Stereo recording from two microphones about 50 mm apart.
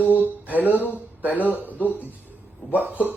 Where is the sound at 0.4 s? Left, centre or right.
Right.